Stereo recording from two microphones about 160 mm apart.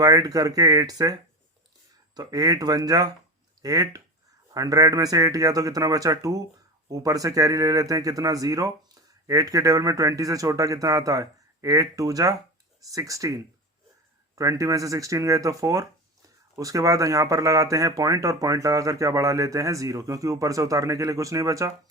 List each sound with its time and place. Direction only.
0.0 s speech: 20° right (ahead or behind)